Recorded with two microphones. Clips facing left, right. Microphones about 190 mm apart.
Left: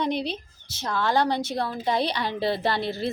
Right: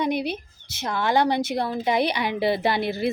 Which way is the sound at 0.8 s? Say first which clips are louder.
Right 2 dB; 15° right (ahead or behind).